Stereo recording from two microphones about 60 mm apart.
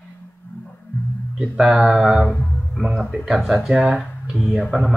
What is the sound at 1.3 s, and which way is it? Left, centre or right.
Speech, centre.